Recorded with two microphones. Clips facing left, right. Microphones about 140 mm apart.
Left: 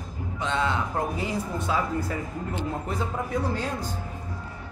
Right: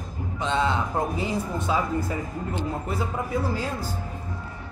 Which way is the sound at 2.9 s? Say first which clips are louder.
Right 1 dB; 5° right (ahead or behind).